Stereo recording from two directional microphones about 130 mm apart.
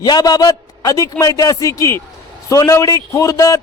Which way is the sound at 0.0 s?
30° left (ahead or behind).